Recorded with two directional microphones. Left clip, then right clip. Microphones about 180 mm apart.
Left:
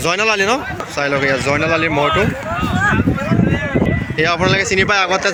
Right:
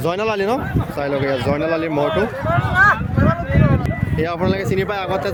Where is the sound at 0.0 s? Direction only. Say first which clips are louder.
Left 4 dB; 20° right (ahead or behind).